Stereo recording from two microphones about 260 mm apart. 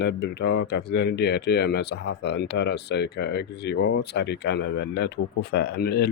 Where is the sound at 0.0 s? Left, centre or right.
Left.